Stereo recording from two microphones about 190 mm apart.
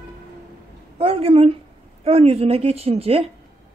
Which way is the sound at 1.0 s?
30° right (ahead or behind).